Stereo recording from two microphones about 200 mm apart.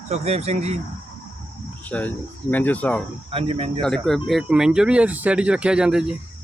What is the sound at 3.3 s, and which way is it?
Speech, 30° right (ahead or behind).